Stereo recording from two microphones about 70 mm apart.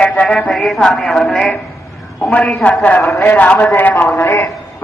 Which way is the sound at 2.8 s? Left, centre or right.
Left.